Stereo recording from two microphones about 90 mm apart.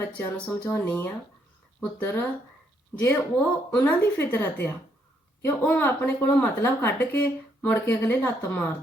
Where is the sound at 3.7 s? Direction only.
20° left (ahead or behind).